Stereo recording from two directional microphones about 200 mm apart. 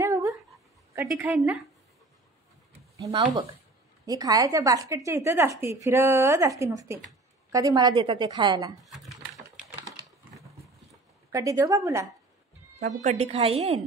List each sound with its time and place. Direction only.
0.0 s dog: 15° right (ahead or behind)
0.9 s a woman's voice: 10° right (ahead or behind)
3.0 s a woman's voice: 20° right (ahead or behind)
9.8 s a sound: centre (ahead or behind)
11.3 s a woman's voice: 15° right (ahead or behind)
12.7 s a woman's voice: 35° right (ahead or behind)